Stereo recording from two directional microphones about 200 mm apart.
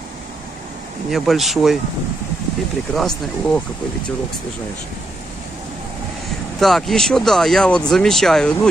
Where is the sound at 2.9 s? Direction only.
Centre (ahead or behind).